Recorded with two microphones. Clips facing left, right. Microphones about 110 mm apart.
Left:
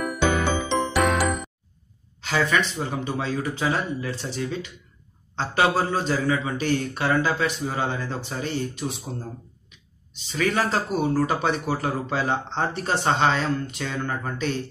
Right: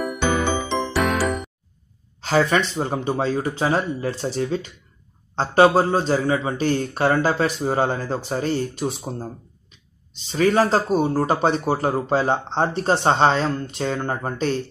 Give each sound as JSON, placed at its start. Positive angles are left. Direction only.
{"t": 0.2, "sound": "music", "side_deg": 0}
{"t": 2.2, "sound": "speech", "side_deg": -35}
{"t": 10.3, "sound": "speech", "side_deg": -35}